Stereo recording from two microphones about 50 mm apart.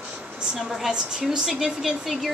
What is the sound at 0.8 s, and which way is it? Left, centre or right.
A woman's voice, centre.